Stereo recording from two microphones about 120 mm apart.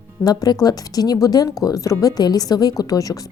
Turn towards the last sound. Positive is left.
turn(degrees=30)  # may be behind; listen again after turning